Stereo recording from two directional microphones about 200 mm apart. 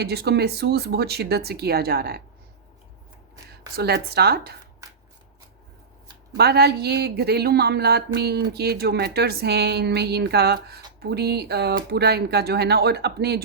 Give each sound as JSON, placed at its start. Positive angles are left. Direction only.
{"t": 0.0, "sound": "speech", "side_deg": -55}
{"t": 3.8, "sound": "speech", "side_deg": -55}
{"t": 6.3, "sound": "speech", "side_deg": -55}